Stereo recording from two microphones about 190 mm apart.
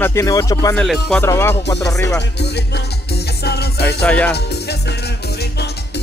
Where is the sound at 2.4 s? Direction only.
60° left (ahead or behind).